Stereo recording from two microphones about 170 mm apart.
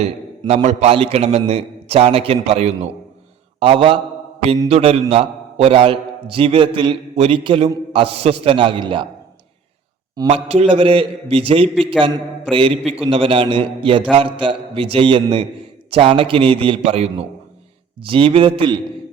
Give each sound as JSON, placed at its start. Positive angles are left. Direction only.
{"t": 0.0, "sound": "a man's voice", "side_deg": -40}
{"t": 10.2, "sound": "a man's voice", "side_deg": -40}